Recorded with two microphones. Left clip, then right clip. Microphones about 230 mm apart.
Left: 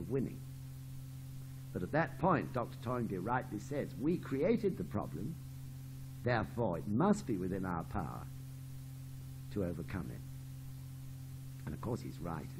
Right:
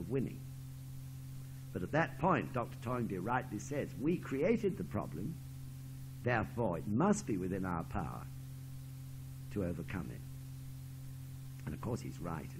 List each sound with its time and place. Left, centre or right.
0.1 s speech: right
1.7 s speech: right
6.2 s speech: right
9.5 s speech: right
11.6 s speech: right